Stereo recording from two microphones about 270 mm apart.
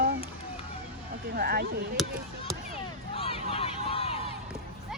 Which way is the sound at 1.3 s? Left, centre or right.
Right.